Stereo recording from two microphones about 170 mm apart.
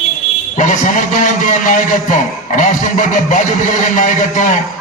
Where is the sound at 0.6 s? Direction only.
45° left (ahead or behind).